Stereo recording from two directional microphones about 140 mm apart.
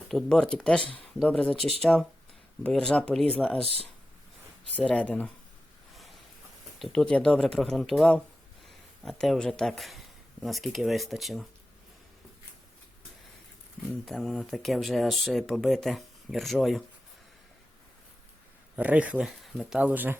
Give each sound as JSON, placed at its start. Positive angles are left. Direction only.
{"t": 0.1, "sound": "speech", "side_deg": 5}
{"t": 4.7, "sound": "speech", "side_deg": 10}
{"t": 6.7, "sound": "speech", "side_deg": 5}
{"t": 14.0, "sound": "speech", "side_deg": 0}
{"t": 18.8, "sound": "speech", "side_deg": -10}